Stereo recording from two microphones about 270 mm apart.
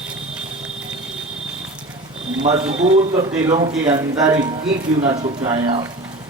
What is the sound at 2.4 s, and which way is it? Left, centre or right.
A man's voice, right.